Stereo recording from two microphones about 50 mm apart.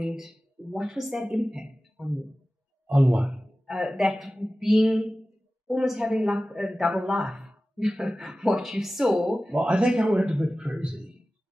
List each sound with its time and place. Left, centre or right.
0.0 s speech: centre
2.9 s a sound: right
3.7 s a man's voice: centre